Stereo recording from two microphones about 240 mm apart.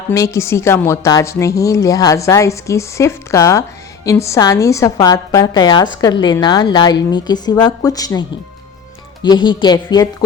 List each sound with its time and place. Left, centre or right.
0.1 s a woman's voice: centre
9.2 s a woman's voice: centre